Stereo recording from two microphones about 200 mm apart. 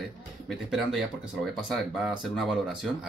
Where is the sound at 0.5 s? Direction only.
Centre (ahead or behind).